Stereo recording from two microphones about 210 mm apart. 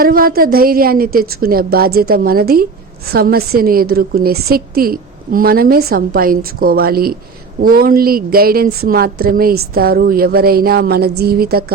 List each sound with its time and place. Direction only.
0.0 s a woman's voice: 45° right (ahead or behind)